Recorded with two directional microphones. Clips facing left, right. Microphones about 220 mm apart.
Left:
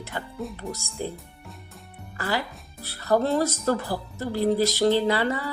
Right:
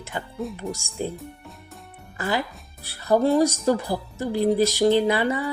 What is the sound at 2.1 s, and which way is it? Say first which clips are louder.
Speech: right 2 dB; 20° right (ahead or behind).